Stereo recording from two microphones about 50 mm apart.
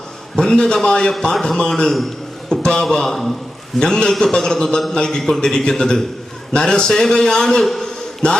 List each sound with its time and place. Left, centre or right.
0.3 s a man's voice: centre
2.5 s a sound: centre
2.9 s a man's voice: centre
8.2 s mantra: left